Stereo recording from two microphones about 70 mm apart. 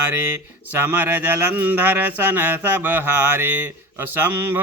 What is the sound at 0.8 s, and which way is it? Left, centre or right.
Mantra, right.